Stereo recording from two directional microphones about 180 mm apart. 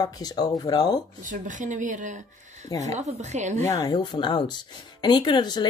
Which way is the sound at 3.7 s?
20° left (ahead or behind).